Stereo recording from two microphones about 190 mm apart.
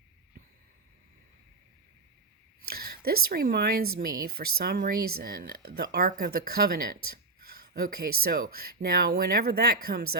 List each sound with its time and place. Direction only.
2.6 s speech: 50° right (ahead or behind)